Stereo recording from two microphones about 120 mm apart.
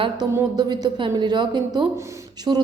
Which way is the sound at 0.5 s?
30° right (ahead or behind).